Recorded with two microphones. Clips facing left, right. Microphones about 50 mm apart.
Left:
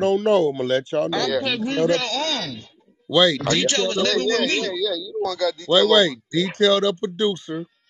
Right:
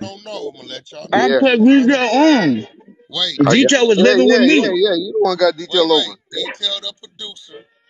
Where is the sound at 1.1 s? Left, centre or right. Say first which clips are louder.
Right 10 dB; right.